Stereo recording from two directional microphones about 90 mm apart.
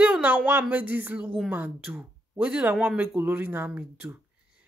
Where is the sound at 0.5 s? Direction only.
20° right (ahead or behind).